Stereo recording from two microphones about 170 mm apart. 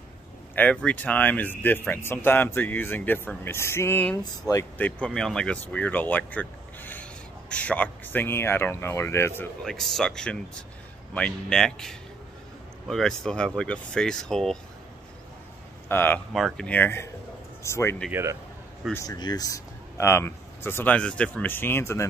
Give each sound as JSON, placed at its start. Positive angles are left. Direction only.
{"t": 0.6, "sound": "speech", "side_deg": 10}
{"t": 4.7, "sound": "speech", "side_deg": 10}
{"t": 9.4, "sound": "speech", "side_deg": 5}
{"t": 15.9, "sound": "speech", "side_deg": 10}
{"t": 16.3, "sound": "speech", "side_deg": 0}
{"t": 18.1, "sound": "speech", "side_deg": -15}
{"t": 19.0, "sound": "speech", "side_deg": 25}